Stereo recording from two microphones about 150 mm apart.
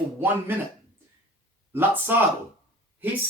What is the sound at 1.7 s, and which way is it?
Speech, 15° right (ahead or behind).